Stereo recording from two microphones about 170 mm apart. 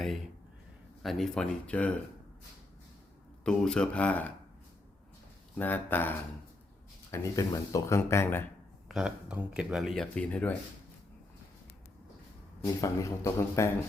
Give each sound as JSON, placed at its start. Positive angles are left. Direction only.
{"t": 1.0, "sound": "speech", "side_deg": 5}
{"t": 3.4, "sound": "speech", "side_deg": 5}
{"t": 5.5, "sound": "speech", "side_deg": 10}
{"t": 8.9, "sound": "speech", "side_deg": -5}
{"t": 12.6, "sound": "speech", "side_deg": 20}